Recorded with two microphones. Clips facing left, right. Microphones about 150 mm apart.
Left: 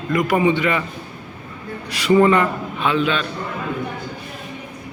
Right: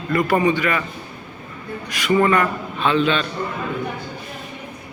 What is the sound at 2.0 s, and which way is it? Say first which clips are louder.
Speech: left 3 dB; 25° left (ahead or behind).